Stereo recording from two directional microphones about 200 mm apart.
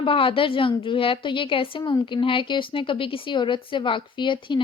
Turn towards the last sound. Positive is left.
turn(degrees=25)  # may be behind; listen again after turning